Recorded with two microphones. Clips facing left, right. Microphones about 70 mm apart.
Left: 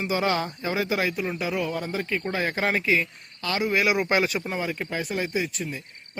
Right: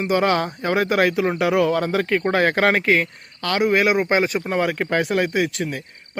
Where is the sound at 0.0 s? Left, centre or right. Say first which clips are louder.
Right 6 dB; right.